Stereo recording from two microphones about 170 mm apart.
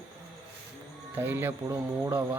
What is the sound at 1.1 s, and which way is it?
Speech, 10° right (ahead or behind).